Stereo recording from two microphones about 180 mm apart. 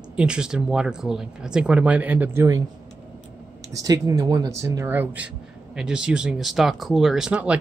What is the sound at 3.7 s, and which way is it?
Speech, 20° right (ahead or behind).